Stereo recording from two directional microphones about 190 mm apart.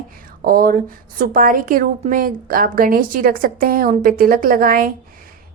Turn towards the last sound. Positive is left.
turn(degrees=-50)  # may be behind; listen again after turning